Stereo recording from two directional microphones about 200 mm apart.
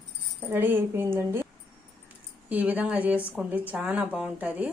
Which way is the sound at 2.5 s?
10° right (ahead or behind).